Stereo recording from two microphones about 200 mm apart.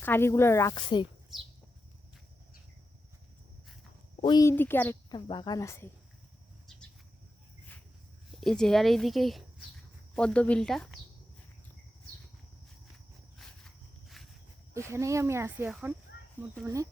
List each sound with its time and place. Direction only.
0.0 s speech: 10° left (ahead or behind)
4.2 s speech: 20° left (ahead or behind)
5.1 s speech: 20° left (ahead or behind)
8.4 s speech: centre (ahead or behind)
13.7 s walk: centre (ahead or behind)
14.7 s speech: 15° right (ahead or behind)